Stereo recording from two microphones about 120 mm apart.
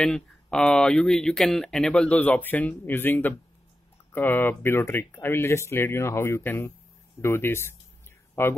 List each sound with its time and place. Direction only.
0.0 s speech: 5° left (ahead or behind)